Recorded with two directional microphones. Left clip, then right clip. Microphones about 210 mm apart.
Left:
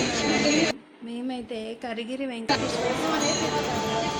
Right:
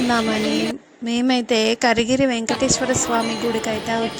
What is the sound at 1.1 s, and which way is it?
Speech, 45° right (ahead or behind).